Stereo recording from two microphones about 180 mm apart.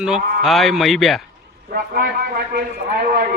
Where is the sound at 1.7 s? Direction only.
55° right (ahead or behind).